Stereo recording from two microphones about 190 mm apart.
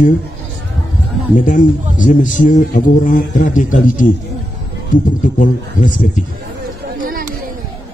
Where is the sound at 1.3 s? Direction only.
45° left (ahead or behind).